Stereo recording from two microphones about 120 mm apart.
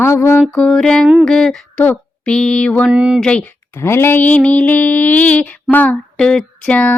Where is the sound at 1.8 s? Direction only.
15° left (ahead or behind).